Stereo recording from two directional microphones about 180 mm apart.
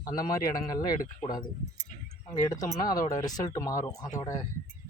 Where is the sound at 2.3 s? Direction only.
20° left (ahead or behind).